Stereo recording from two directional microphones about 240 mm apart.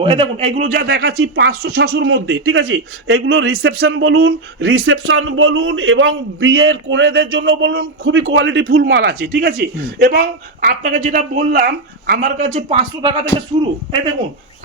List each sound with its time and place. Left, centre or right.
0.0 s speech: right